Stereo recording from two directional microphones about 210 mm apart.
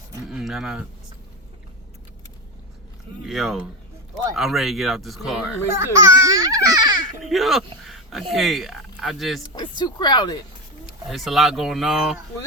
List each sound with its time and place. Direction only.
0.3 s speech: centre (ahead or behind)
3.2 s speech: centre (ahead or behind)
5.7 s a child's voice: 15° right (ahead or behind)
7.3 s speech: centre (ahead or behind)
9.6 s speech: 20° left (ahead or behind)
11.1 s speech: centre (ahead or behind)